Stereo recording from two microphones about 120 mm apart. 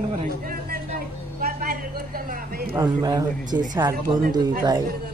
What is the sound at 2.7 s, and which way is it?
Speech, 35° right (ahead or behind).